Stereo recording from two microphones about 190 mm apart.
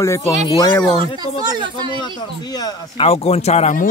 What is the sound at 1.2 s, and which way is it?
Speech, 20° right (ahead or behind).